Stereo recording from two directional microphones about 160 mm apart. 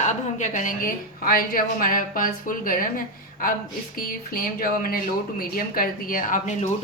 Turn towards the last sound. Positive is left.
turn(degrees=50)  # may be behind; listen again after turning